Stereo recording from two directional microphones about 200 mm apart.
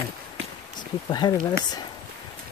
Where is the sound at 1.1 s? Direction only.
20° left (ahead or behind).